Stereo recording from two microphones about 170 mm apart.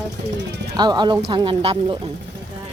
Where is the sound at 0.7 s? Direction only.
25° right (ahead or behind).